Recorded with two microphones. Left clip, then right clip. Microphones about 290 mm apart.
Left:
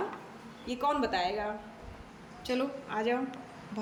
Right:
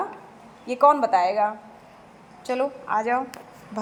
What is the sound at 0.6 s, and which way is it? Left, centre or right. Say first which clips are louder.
Speech: right 13 dB; centre.